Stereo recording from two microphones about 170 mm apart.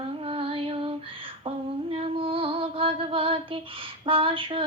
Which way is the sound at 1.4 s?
35° right (ahead or behind).